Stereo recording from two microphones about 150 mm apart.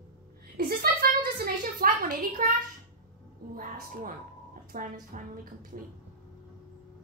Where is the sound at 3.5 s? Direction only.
65° right (ahead or behind).